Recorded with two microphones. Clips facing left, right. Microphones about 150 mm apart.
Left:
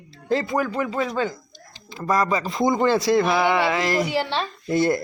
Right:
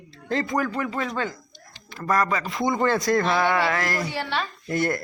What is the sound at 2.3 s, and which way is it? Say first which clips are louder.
Speech: left 4 dB; 30° left (ahead or behind).